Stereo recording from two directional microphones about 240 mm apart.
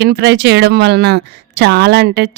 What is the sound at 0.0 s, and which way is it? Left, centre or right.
A woman's voice, right.